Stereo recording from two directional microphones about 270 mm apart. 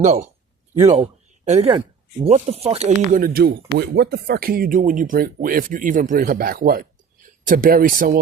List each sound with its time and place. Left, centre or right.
0.0 s speech: right
1.5 s speech: right